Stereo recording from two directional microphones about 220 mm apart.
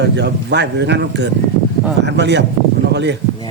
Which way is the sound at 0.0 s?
50° right (ahead or behind).